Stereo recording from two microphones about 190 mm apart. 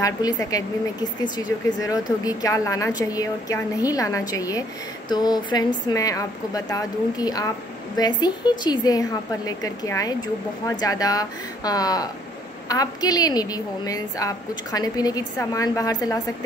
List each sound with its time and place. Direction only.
0.0 s a woman's voice: 20° left (ahead or behind)